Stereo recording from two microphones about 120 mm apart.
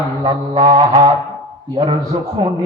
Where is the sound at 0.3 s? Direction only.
35° right (ahead or behind).